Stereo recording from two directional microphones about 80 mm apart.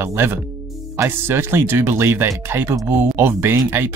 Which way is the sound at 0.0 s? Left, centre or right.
Right.